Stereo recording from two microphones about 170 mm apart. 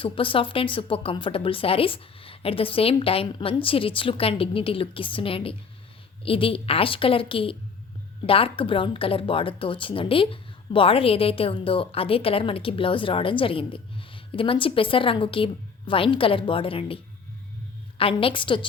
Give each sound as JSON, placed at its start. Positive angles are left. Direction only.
{"t": 0.0, "sound": "speech", "side_deg": 30}